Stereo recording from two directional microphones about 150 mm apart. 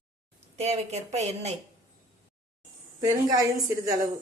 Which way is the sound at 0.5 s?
45° right (ahead or behind).